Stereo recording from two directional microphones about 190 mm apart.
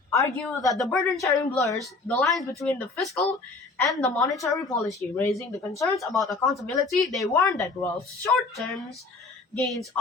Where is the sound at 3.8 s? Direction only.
20° left (ahead or behind).